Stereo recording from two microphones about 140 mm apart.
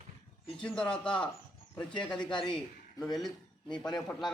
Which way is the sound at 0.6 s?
5° left (ahead or behind).